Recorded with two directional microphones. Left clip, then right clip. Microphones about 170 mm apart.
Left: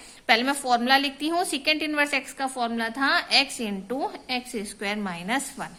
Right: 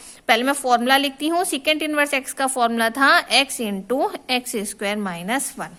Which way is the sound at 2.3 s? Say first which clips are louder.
Right 8 dB; 65° right (ahead or behind).